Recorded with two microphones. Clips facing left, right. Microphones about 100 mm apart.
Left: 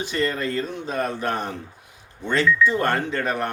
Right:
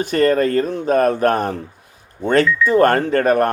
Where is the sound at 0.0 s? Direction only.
50° right (ahead or behind).